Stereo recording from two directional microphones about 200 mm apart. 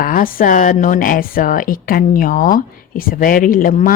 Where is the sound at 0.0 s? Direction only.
45° left (ahead or behind).